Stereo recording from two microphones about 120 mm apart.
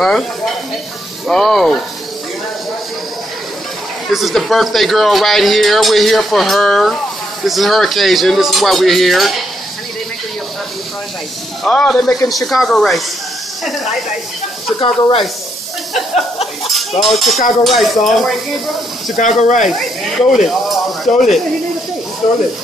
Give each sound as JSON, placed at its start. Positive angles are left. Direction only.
{"t": 1.2, "sound": "speech", "side_deg": 0}
{"t": 4.1, "sound": "speech", "side_deg": 0}
{"t": 11.6, "sound": "speech", "side_deg": 5}
{"t": 14.8, "sound": "speech", "side_deg": 45}
{"t": 17.0, "sound": "speech", "side_deg": 0}
{"t": 19.1, "sound": "speech", "side_deg": 90}
{"t": 20.2, "sound": "speech", "side_deg": 0}